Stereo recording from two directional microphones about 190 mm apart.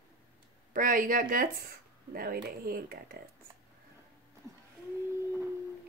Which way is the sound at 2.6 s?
50° right (ahead or behind).